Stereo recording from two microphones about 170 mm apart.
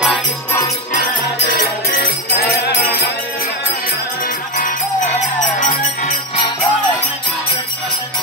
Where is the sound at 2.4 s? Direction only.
65° left (ahead or behind).